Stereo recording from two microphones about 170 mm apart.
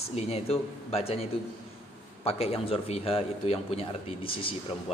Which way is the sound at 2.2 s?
35° left (ahead or behind).